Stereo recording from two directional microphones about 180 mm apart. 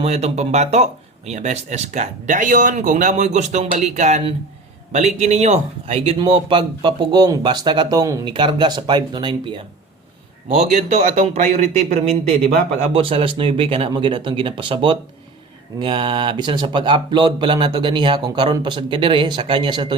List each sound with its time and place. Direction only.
0.0 s speech: 35° right (ahead or behind)
10.7 s speech: 40° right (ahead or behind); by 20.0 s 25° right (ahead or behind)